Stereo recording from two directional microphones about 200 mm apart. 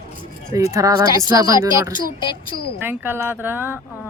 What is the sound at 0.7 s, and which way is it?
Speech, 15° right (ahead or behind).